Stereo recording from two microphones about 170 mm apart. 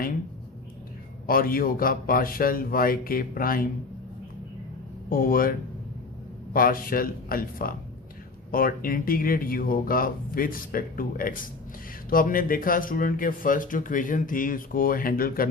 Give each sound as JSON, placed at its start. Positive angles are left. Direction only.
{"t": 1.3, "sound": "speech", "side_deg": 60}
{"t": 5.0, "sound": "speech", "side_deg": 60}